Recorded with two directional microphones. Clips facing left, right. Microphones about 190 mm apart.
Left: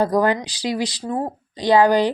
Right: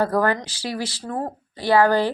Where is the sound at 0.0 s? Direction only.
15° left (ahead or behind).